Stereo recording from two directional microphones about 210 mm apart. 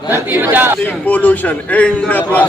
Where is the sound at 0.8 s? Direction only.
5° left (ahead or behind).